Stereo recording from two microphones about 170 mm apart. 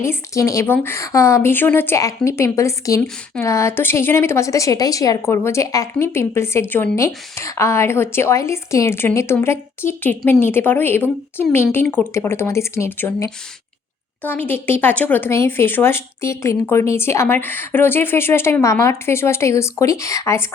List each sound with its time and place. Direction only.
0.0 s a woman's voice: 15° left (ahead or behind)